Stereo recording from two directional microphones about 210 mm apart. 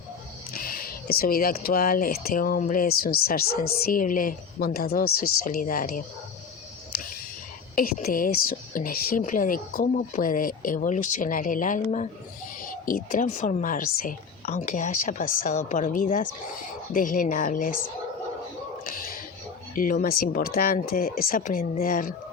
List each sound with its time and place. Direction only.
0.6 s a woman's voice: 45° left (ahead or behind)
7.8 s a woman's voice: 40° left (ahead or behind)
18.9 s a sound: 45° left (ahead or behind)
19.7 s speech: 40° left (ahead or behind)